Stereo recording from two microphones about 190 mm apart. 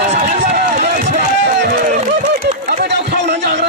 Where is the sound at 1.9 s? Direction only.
40° right (ahead or behind); by 3.2 s 65° right (ahead or behind).